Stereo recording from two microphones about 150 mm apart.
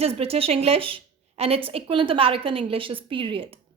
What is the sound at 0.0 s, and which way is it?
A woman's voice, 40° right (ahead or behind).